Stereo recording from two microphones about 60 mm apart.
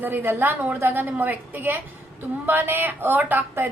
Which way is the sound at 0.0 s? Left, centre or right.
Right.